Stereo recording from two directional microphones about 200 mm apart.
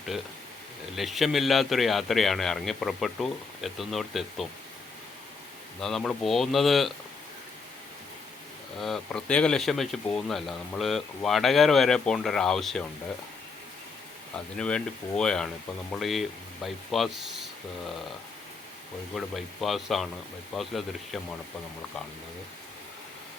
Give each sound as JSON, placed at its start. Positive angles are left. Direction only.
{"t": 0.9, "sound": "speech", "side_deg": 0}
{"t": 5.8, "sound": "speech", "side_deg": 5}
{"t": 8.8, "sound": "speech", "side_deg": 0}
{"t": 14.3, "sound": "speech", "side_deg": 5}
{"t": 19.1, "sound": "speech", "side_deg": 0}